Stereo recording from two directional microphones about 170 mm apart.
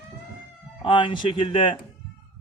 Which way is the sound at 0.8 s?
30° left (ahead or behind).